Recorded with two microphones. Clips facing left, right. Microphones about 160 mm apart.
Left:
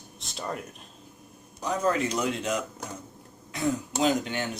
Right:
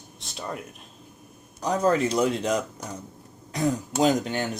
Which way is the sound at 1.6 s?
35° right (ahead or behind).